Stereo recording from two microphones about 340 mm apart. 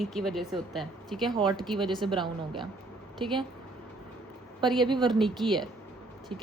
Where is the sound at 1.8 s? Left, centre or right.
Centre.